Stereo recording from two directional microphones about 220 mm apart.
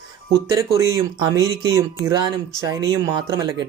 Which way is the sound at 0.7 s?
15° right (ahead or behind).